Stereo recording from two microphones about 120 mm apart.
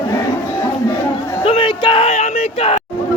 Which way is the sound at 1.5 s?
45° left (ahead or behind).